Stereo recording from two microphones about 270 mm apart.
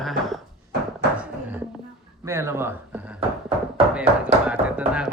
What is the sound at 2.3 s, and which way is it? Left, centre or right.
Speech, centre.